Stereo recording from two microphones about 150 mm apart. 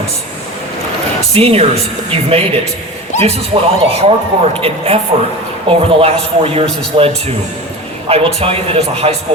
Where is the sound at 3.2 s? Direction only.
40° right (ahead or behind).